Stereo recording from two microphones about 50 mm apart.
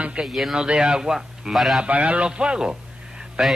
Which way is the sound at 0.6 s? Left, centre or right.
Centre.